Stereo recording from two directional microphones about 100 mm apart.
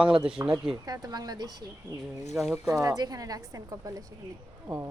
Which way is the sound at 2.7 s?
35° right (ahead or behind).